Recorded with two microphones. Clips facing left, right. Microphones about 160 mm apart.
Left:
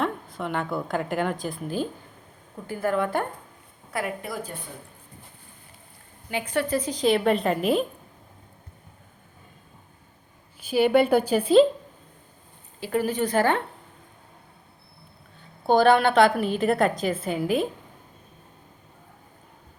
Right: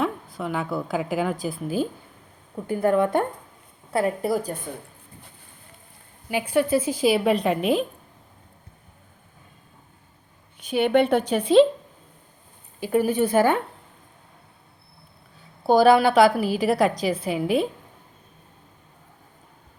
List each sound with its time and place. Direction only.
0.0 s a woman's voice: centre (ahead or behind)
2.6 s a woman's voice: 20° right (ahead or behind)
3.9 s a woman's voice: 35° right (ahead or behind)
6.3 s a woman's voice: 10° right (ahead or behind)
10.7 s a woman's voice: 5° left (ahead or behind)
12.8 s a woman's voice: 15° right (ahead or behind)
15.6 s a woman's voice: 5° right (ahead or behind)